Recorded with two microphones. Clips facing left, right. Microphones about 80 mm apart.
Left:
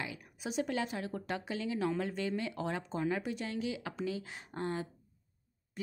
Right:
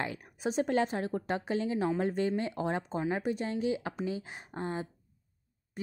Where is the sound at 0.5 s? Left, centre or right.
Right.